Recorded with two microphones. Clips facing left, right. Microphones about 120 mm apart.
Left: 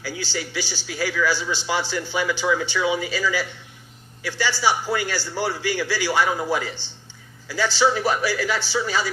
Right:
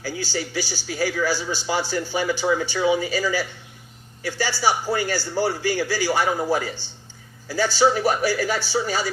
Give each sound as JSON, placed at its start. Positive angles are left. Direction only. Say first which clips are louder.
{"t": 0.0, "sound": "a man's voice", "louder": "right 2 dB", "side_deg": -45}